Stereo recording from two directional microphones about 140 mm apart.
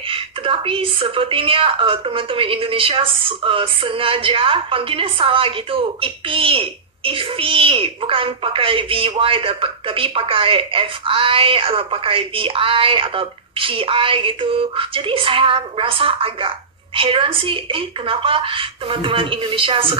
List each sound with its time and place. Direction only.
0.1 s a woman's voice: 40° right (ahead or behind)